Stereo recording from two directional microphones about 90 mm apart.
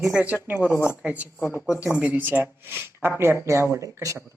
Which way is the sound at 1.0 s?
10° right (ahead or behind).